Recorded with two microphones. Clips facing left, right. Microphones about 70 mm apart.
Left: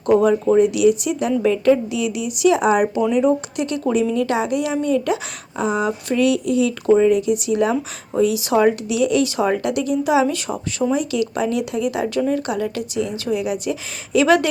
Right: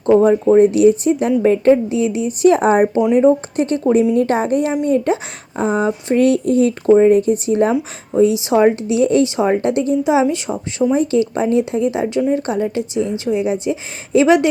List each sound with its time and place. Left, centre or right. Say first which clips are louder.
0.0 s speech: right 4 dB; right
10.9 s speech: right 5 dB; right